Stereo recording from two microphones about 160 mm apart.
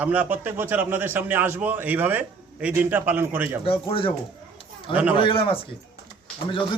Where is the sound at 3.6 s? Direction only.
35° left (ahead or behind).